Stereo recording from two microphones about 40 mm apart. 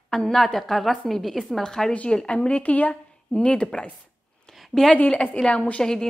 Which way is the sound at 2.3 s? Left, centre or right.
Left.